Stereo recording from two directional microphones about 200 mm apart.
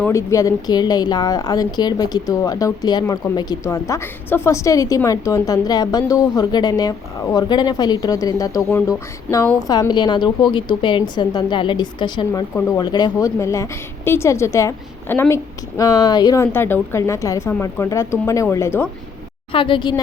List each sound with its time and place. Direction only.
0.0 s a woman's voice: 15° left (ahead or behind)
19.5 s a woman's voice: 25° left (ahead or behind)